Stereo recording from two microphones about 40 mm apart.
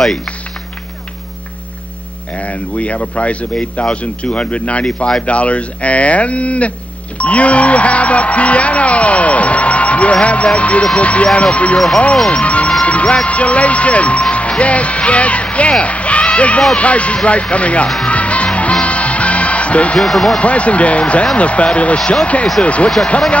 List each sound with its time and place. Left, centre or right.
0.0 s speech: centre
2.3 s speech: left
12.3 s music: left
12.8 s speech: left
18.0 s music: left
20.0 s speech: centre
20.3 s speech: left